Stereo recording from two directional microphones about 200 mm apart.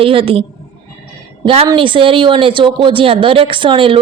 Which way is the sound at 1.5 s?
25° right (ahead or behind).